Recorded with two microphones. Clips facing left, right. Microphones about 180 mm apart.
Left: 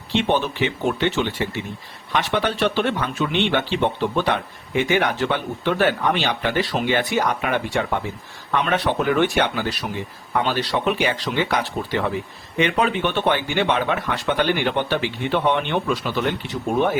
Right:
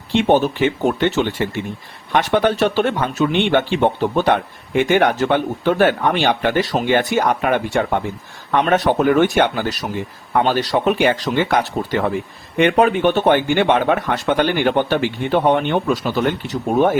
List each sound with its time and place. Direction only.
0.1 s speech: 45° right (ahead or behind)